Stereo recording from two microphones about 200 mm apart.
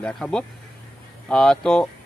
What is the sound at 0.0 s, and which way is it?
Speech, 5° left (ahead or behind).